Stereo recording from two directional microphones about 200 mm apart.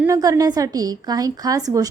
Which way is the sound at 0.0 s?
15° right (ahead or behind).